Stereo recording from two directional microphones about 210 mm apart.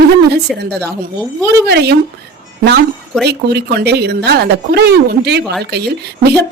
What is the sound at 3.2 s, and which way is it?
A woman's voice, 50° right (ahead or behind).